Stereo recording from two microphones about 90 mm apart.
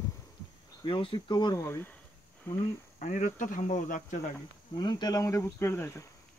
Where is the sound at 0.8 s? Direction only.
70° left (ahead or behind).